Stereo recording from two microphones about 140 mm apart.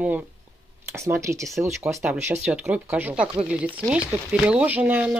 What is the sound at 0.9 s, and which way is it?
Speech, 20° right (ahead or behind).